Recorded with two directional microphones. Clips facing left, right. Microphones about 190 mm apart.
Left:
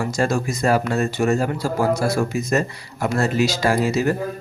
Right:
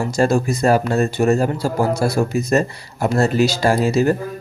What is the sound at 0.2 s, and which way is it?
Speech, 35° right (ahead or behind).